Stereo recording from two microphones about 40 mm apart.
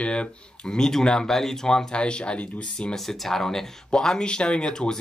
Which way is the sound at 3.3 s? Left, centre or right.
Centre.